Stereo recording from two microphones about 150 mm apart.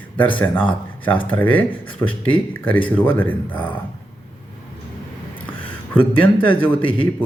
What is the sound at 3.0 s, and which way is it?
Speech, 10° left (ahead or behind).